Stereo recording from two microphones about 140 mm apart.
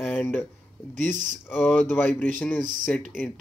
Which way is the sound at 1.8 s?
15° left (ahead or behind).